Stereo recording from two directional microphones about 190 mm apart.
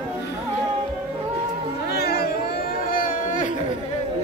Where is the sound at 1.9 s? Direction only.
55° left (ahead or behind).